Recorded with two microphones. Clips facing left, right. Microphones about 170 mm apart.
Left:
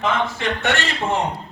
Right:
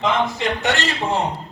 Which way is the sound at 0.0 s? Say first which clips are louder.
Right 2 dB; 15° right (ahead or behind).